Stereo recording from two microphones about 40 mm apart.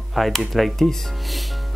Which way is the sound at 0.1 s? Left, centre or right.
Centre.